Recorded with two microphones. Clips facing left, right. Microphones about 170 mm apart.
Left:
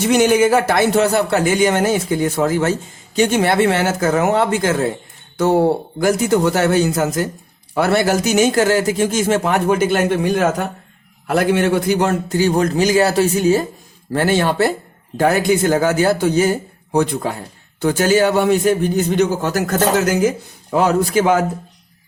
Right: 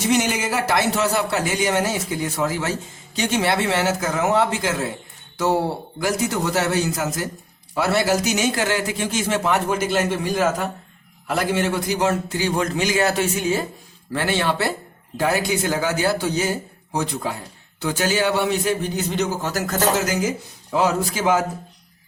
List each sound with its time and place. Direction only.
0.0 s a man's voice: 55° left (ahead or behind)